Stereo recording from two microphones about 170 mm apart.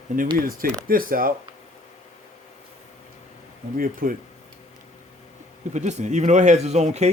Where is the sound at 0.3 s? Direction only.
55° right (ahead or behind).